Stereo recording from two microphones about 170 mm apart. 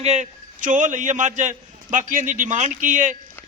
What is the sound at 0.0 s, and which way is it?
A man's voice, 45° right (ahead or behind).